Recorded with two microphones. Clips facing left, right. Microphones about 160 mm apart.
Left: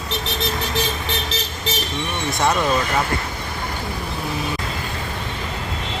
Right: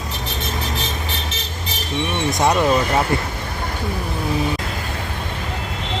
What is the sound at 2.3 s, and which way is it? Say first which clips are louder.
Speech: right 2 dB; 20° right (ahead or behind).